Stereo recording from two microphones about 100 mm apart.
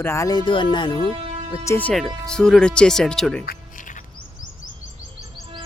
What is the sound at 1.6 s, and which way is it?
Speech, 20° left (ahead or behind).